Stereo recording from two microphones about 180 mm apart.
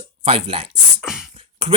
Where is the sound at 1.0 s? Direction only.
Centre (ahead or behind).